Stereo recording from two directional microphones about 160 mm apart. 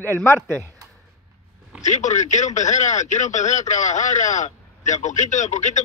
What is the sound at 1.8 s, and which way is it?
A man's voice, 50° left (ahead or behind).